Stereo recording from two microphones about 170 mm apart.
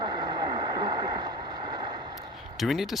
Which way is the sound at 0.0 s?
25° right (ahead or behind).